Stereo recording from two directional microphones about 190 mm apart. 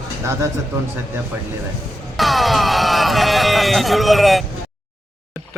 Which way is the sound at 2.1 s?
Centre (ahead or behind).